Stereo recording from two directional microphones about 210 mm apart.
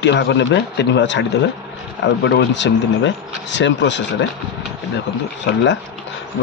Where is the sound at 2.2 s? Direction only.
55° left (ahead or behind).